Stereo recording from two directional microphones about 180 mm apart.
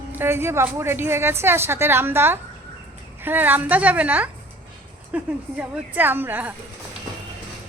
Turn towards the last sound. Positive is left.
turn(degrees=-10)  # may be behind; listen again after turning